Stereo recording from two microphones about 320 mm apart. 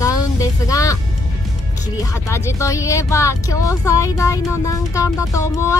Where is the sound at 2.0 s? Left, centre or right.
Centre.